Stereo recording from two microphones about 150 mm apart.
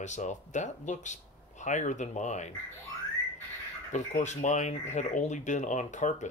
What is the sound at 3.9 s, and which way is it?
Speech, 50° left (ahead or behind).